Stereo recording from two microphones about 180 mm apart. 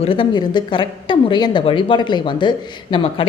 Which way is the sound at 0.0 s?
30° left (ahead or behind).